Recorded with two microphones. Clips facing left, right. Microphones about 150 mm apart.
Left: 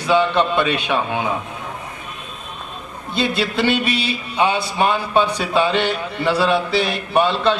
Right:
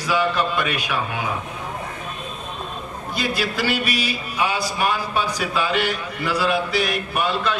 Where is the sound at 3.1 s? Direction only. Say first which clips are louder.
Left 4 dB; 25° left (ahead or behind).